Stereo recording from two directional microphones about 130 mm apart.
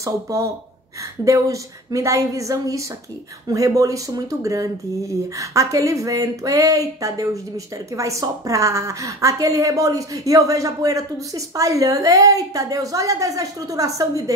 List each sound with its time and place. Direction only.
0.0 s speech: 25° right (ahead or behind)